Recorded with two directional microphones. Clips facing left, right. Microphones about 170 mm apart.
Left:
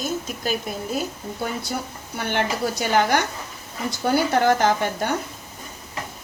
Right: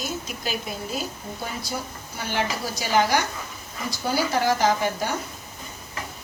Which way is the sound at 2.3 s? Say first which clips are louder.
Left 4 dB; 60° left (ahead or behind).